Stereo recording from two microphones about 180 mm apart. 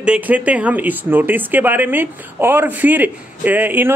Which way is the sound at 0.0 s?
5° right (ahead or behind).